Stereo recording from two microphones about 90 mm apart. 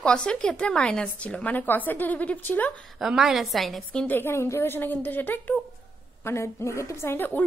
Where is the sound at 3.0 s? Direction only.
5° right (ahead or behind).